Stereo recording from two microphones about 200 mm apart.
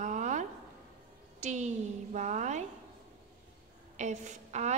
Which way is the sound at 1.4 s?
35° right (ahead or behind).